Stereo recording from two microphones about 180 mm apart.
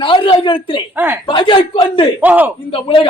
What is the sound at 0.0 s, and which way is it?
Speech, 25° left (ahead or behind).